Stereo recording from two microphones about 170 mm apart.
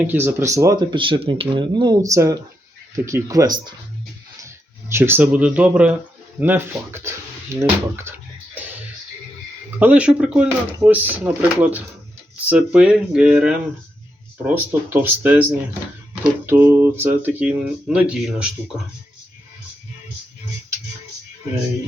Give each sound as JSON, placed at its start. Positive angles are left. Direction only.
{"t": 0.0, "sound": "speech", "side_deg": -10}
{"t": 9.7, "sound": "speech", "side_deg": -10}
{"t": 16.5, "sound": "speech", "side_deg": -15}